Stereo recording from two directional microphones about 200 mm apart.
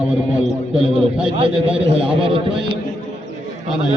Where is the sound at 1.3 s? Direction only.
25° right (ahead or behind).